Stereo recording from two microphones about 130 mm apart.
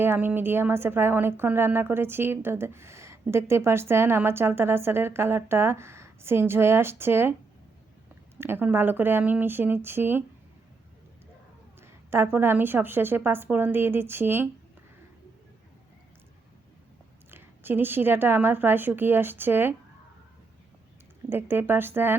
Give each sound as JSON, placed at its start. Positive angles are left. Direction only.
{"t": 0.0, "sound": "a woman's voice", "side_deg": -15}
{"t": 8.4, "sound": "a woman's voice", "side_deg": -15}
{"t": 11.8, "sound": "a woman's voice", "side_deg": -20}
{"t": 17.3, "sound": "a woman's voice", "side_deg": -15}
{"t": 21.2, "sound": "a woman's voice", "side_deg": -15}